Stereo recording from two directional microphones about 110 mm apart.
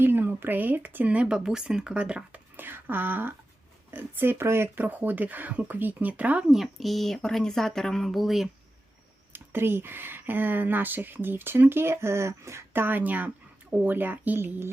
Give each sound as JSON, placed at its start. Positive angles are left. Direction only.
{"t": 0.0, "sound": "speech", "side_deg": -20}
{"t": 6.6, "sound": "speech", "side_deg": 0}
{"t": 9.3, "sound": "speech", "side_deg": -20}